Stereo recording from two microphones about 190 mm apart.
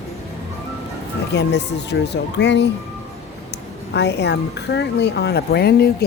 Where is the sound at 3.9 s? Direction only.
65° left (ahead or behind).